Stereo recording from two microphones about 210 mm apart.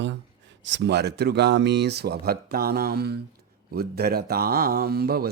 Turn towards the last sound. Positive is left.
turn(degrees=-45)  # may be behind; listen again after turning